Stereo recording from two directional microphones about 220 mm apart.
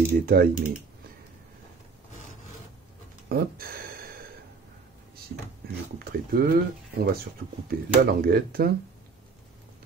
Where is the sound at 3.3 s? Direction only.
45° right (ahead or behind).